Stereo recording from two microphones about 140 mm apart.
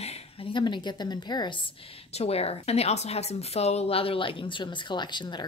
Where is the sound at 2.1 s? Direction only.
45° left (ahead or behind).